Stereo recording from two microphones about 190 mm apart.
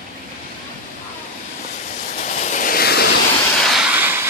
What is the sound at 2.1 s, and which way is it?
Vehicle, 40° left (ahead or behind).